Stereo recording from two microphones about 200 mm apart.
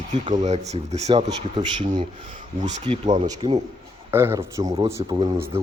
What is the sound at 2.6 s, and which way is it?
Speech, 30° right (ahead or behind).